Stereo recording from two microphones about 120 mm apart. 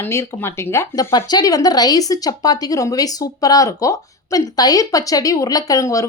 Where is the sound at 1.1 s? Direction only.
35° left (ahead or behind).